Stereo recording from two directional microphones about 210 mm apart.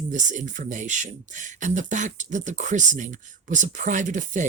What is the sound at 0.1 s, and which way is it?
Speech, 35° right (ahead or behind).